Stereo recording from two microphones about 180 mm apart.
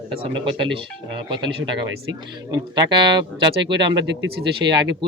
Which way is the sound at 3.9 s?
75° right (ahead or behind).